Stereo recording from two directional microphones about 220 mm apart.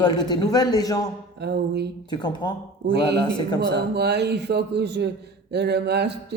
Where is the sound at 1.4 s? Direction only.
50° right (ahead or behind).